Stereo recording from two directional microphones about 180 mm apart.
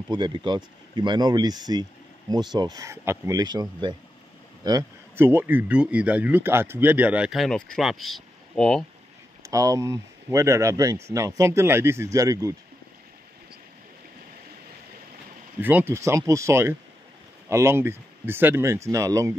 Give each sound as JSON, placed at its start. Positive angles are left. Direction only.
{"t": 0.1, "sound": "speech", "side_deg": -25}
{"t": 9.4, "sound": "speech", "side_deg": -20}
{"t": 15.6, "sound": "speech", "side_deg": -10}